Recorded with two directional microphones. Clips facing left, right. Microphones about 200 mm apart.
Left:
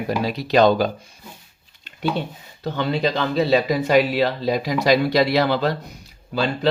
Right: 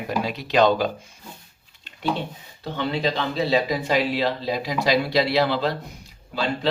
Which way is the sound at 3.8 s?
45° left (ahead or behind).